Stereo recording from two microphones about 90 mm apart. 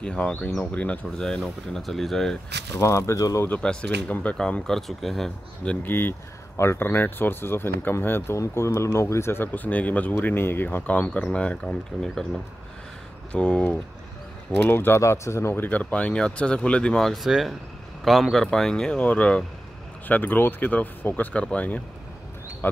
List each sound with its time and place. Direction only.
0.0 s speech: 15° left (ahead or behind)
2.7 s speech: 35° left (ahead or behind)
3.4 s speech: 10° left (ahead or behind)
5.9 s speech: 25° left (ahead or behind); by 12.3 s 10° left (ahead or behind)
13.3 s speech: 10° left (ahead or behind)
14.7 s speech: 25° left (ahead or behind)